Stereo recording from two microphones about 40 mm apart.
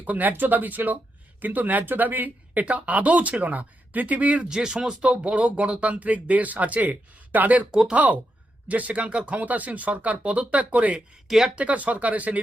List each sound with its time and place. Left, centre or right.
0.0 s speech: right
4.4 s speech: centre
5.0 s speech: right
11.3 s speech: centre
11.5 s speech: right